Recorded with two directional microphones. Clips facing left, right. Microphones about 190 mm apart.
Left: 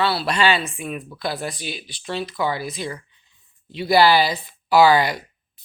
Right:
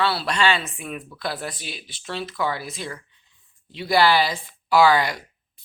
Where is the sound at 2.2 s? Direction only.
15° left (ahead or behind).